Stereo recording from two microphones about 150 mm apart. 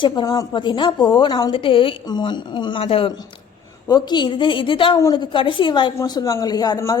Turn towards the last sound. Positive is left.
turn(degrees=20)  # may be behind; listen again after turning